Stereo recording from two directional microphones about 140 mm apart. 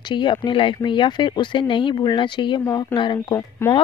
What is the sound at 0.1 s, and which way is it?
Speech, 35° left (ahead or behind).